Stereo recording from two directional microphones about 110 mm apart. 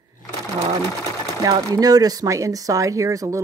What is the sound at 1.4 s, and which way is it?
Speech, 35° right (ahead or behind).